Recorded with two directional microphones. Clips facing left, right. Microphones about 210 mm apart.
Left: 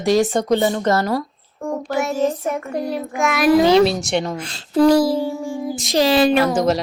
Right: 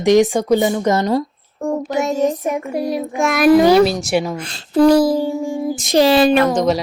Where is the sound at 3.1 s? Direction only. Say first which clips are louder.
Right 1 dB; 35° right (ahead or behind).